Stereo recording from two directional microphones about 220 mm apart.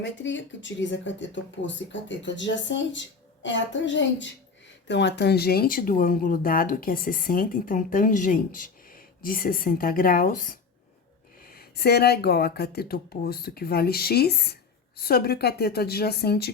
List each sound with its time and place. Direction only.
0.0 s speech: 55° left (ahead or behind)